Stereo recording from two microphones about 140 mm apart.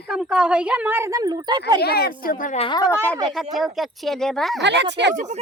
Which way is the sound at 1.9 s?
90° left.